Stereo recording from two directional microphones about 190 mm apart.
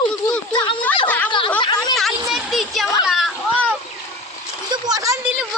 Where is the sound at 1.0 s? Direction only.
10° left (ahead or behind).